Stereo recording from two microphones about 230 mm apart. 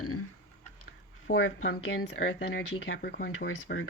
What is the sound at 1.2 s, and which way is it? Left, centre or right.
Speech, left.